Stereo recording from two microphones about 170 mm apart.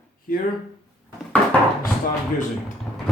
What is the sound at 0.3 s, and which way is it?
Mantra, 55° left (ahead or behind).